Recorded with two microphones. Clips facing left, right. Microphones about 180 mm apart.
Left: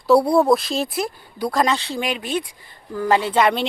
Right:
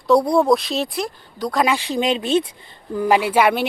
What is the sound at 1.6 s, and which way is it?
Speech, 10° right (ahead or behind).